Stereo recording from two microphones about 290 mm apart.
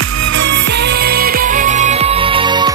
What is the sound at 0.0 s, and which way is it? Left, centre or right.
Music, right.